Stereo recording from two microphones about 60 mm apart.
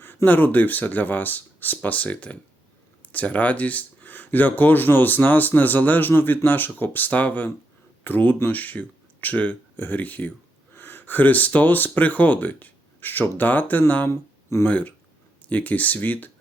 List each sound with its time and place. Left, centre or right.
0.3 s speech: left